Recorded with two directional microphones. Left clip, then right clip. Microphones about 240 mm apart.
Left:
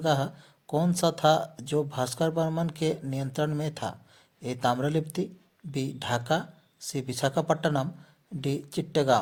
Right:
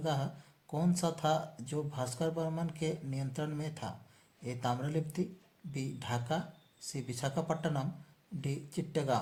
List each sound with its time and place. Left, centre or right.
0.0 s speech: left